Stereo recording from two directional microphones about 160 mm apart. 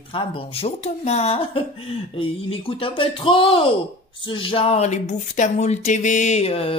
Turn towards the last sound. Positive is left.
turn(degrees=40)  # may be behind; listen again after turning